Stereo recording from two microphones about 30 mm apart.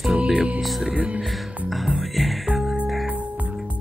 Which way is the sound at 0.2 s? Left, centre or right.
Right.